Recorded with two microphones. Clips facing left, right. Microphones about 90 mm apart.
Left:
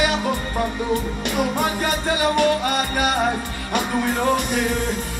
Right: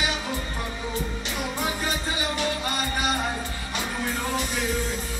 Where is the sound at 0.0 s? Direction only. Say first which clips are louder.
Left 8 dB; 60° left (ahead or behind).